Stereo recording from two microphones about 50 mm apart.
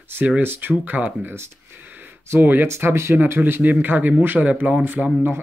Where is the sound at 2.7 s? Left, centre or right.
Right.